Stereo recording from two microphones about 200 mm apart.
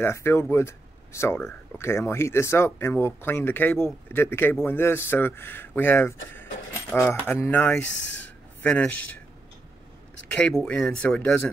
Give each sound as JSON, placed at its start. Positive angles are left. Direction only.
{"t": 0.0, "sound": "speech", "side_deg": 10}
{"t": 7.8, "sound": "speech", "side_deg": 65}
{"t": 8.6, "sound": "speech", "side_deg": 5}
{"t": 10.2, "sound": "speech", "side_deg": 5}